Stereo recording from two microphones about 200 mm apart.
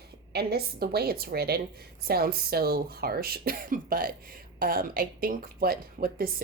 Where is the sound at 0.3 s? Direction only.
50° right (ahead or behind).